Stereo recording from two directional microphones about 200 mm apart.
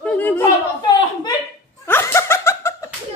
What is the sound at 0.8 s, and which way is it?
Speech, 20° left (ahead or behind).